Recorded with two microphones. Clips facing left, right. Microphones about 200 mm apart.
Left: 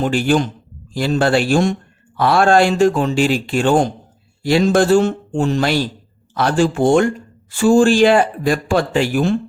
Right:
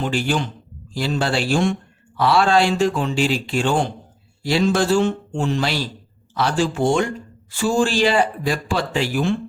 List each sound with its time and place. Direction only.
0.0 s speech: 50° left (ahead or behind)